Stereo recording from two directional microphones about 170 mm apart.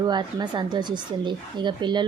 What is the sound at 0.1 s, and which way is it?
A woman's voice, 25° right (ahead or behind).